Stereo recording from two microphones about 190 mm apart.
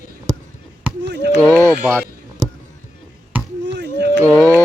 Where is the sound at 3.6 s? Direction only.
65° right (ahead or behind).